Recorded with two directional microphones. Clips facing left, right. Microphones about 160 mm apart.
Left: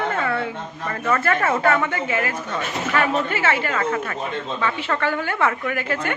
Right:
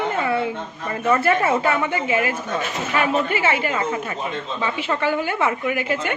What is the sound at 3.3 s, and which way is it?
A woman's voice, 15° right (ahead or behind).